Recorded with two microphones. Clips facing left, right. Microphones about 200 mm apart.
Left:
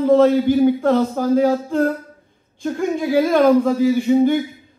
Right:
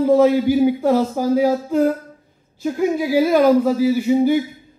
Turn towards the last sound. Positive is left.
turn(degrees=-5)  # may be behind; listen again after turning